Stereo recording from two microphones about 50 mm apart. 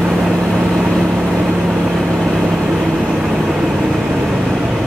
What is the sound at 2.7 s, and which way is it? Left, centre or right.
Vehicle, centre.